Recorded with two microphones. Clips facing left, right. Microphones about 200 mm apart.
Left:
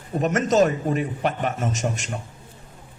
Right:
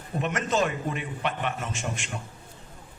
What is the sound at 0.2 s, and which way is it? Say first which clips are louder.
A man's voice: left 7 dB; 40° left (ahead or behind).